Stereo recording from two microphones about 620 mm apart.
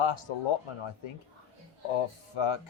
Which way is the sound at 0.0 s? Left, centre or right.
Left.